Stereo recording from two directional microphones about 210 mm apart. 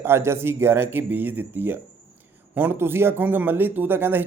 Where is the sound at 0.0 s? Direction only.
10° right (ahead or behind).